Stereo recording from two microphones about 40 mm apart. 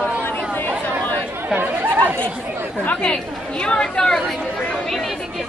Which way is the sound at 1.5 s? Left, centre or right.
Right.